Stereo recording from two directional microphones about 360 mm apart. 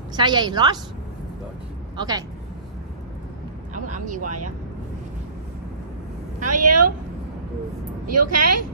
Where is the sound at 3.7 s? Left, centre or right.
Right.